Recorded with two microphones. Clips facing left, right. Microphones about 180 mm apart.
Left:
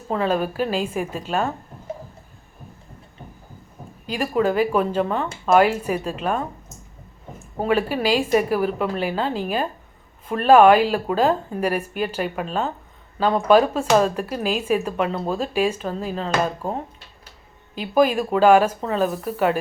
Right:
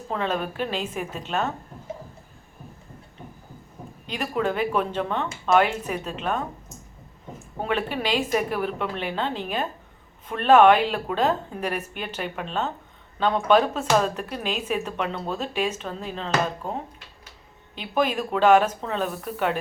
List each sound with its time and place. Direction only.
0.1 s a woman's voice: 5° left (ahead or behind)
4.1 s speech: 5° left (ahead or behind)
7.6 s a woman's voice: 5° left (ahead or behind)
17.7 s a woman's voice: 5° left (ahead or behind)